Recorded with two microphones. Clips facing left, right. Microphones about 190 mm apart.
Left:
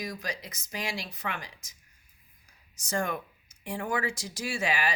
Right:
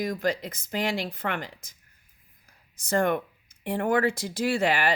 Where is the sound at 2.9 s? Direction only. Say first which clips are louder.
Right 7 dB; 60° right (ahead or behind).